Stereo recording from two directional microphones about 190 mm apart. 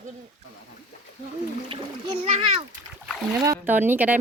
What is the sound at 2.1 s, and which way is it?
Speech, 30° right (ahead or behind).